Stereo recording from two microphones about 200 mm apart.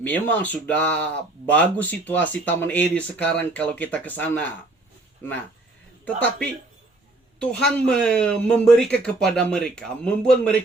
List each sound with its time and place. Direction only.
0.0 s speech: 10° left (ahead or behind)
7.3 s speech: 5° left (ahead or behind)